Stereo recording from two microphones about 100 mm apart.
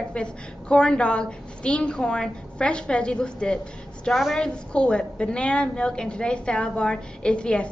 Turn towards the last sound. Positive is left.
turn(degrees=10)  # may be behind; listen again after turning